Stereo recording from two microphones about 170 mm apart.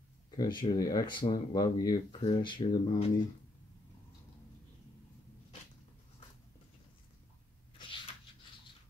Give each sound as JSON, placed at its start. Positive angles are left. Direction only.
{"t": 0.4, "sound": "speech", "side_deg": 25}